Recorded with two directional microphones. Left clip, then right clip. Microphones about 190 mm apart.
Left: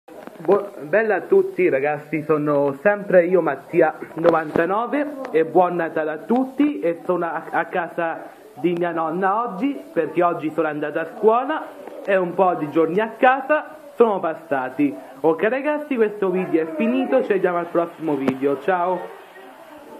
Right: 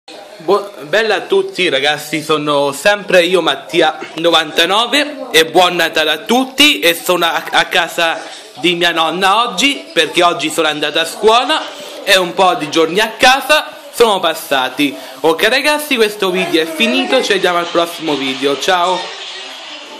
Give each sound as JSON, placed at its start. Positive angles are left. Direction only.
{"t": 0.5, "sound": "a man's voice", "side_deg": -25}